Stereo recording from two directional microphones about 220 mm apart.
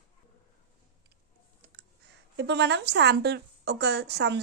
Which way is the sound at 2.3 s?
50° right (ahead or behind).